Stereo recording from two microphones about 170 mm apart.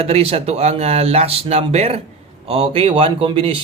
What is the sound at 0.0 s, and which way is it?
Speech, 35° right (ahead or behind).